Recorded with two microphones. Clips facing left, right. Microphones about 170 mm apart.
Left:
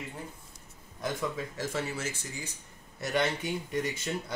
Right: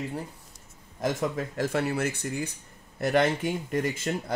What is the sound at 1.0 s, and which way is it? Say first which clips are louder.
Speech: right 5 dB; 55° right (ahead or behind).